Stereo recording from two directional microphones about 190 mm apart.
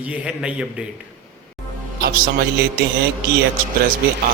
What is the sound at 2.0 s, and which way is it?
Speech, 50° right (ahead or behind).